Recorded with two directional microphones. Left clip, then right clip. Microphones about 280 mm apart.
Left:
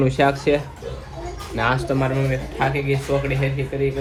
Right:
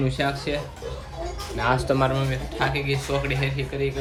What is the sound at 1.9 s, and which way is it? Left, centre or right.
Speech, right.